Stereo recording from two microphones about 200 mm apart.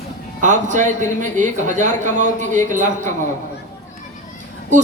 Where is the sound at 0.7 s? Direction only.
35° right (ahead or behind).